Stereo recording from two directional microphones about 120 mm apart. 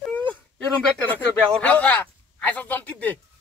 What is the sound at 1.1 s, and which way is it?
Speech, 10° left (ahead or behind).